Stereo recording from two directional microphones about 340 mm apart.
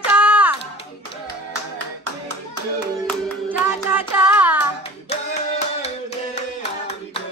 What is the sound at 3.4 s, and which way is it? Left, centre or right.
Child singing, centre.